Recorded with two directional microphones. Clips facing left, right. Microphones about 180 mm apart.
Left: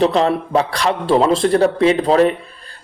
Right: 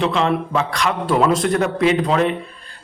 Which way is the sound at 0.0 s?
35° left (ahead or behind).